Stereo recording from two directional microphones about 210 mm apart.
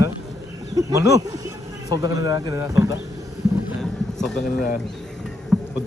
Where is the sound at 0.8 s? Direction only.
15° right (ahead or behind).